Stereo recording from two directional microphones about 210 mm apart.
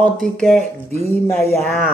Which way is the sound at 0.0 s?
5° left (ahead or behind).